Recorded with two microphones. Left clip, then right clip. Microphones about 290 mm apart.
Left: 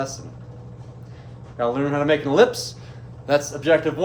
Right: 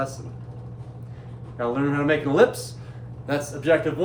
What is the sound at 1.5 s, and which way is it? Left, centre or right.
A man's voice, left.